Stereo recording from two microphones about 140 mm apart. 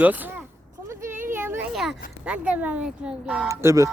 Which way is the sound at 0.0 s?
10° right (ahead or behind).